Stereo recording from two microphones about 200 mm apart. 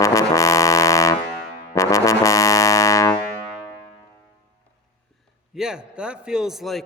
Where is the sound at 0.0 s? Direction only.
15° left (ahead or behind).